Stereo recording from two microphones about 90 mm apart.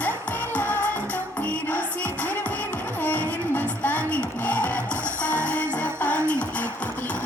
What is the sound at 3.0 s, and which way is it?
Music, 15° left (ahead or behind).